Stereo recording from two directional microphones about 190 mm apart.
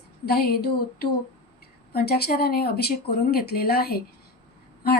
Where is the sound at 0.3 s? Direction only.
55° left (ahead or behind).